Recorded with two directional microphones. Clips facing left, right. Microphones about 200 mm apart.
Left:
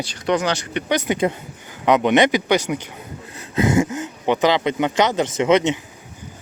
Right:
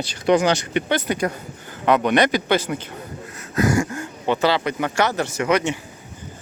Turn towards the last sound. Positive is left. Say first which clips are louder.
# left 4 dB
turn(degrees=20)  # may be behind; listen again after turning